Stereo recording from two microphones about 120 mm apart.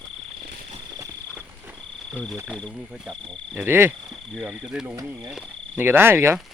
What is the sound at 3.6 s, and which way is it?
Speech, 20° right (ahead or behind).